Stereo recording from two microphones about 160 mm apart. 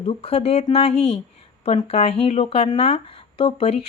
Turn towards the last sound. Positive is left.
turn(degrees=35)  # may be behind; listen again after turning